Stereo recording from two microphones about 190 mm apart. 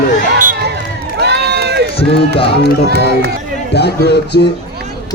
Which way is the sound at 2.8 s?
60° right (ahead or behind).